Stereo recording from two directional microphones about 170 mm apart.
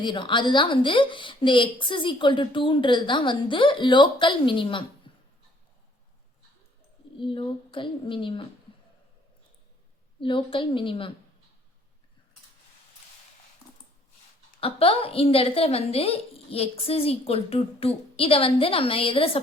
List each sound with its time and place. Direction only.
0.0 s a woman's voice: 30° left (ahead or behind)
5.1 s a sound: 30° left (ahead or behind)
7.2 s a woman's voice: 30° left (ahead or behind)
10.2 s a woman's voice: 30° left (ahead or behind)
14.6 s a woman's voice: 35° left (ahead or behind)